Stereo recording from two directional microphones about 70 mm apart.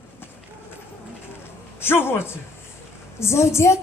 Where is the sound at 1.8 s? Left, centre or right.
Left.